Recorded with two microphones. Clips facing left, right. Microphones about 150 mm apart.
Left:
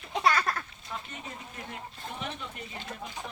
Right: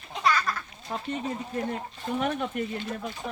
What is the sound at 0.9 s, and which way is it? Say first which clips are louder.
Speech: right 9 dB; 35° right (ahead or behind).